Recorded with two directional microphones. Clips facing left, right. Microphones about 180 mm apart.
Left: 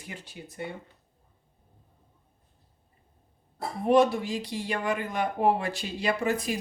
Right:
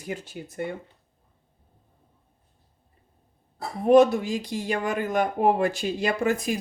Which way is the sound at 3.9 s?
45° right (ahead or behind).